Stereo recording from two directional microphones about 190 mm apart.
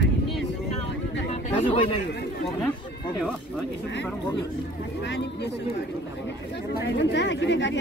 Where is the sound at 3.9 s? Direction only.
65° left (ahead or behind).